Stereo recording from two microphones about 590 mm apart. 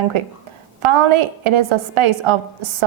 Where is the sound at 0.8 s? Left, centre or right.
Right.